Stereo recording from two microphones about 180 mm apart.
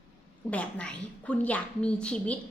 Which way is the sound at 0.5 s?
5° left (ahead or behind).